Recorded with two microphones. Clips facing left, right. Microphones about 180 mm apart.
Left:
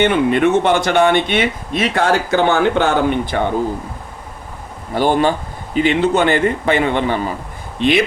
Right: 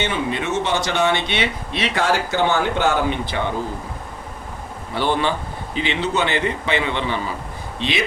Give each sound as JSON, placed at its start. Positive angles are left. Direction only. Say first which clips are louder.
{"t": 0.0, "sound": "speech", "louder": "left 10 dB", "side_deg": 60}
{"t": 4.9, "sound": "speech", "louder": "left 6 dB", "side_deg": 45}